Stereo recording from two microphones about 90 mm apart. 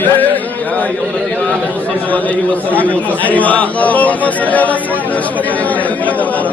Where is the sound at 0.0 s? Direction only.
20° left (ahead or behind).